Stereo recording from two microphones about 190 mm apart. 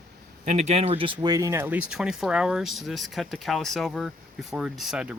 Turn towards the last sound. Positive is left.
turn(degrees=-5)  # may be behind; listen again after turning